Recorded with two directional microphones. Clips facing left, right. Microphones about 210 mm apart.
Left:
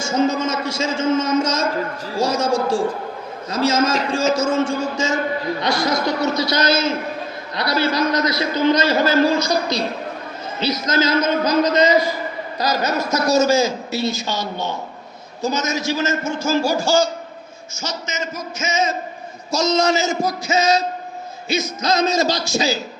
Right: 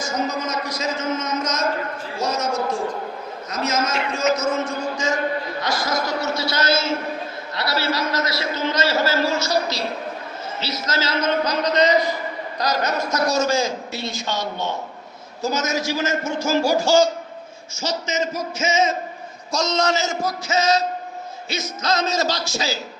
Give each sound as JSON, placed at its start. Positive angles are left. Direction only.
{"t": 0.0, "sound": "a man's voice", "side_deg": 25}
{"t": 6.5, "sound": "a man's voice", "side_deg": 20}
{"t": 10.9, "sound": "a man's voice", "side_deg": 10}
{"t": 17.7, "sound": "speech", "side_deg": -35}
{"t": 19.5, "sound": "a man's voice", "side_deg": 5}